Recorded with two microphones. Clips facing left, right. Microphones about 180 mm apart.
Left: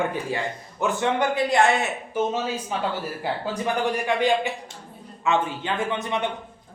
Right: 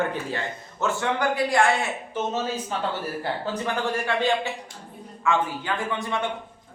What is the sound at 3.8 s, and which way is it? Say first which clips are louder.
A man's voice: left 2 dB; 15° left (ahead or behind).